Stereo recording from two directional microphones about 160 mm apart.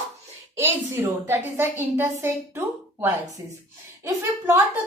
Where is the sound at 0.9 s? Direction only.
15° right (ahead or behind).